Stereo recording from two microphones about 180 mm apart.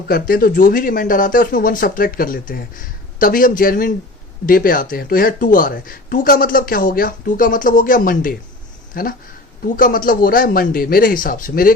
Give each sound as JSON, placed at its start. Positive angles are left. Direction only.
{"t": 0.1, "sound": "speech", "side_deg": 55}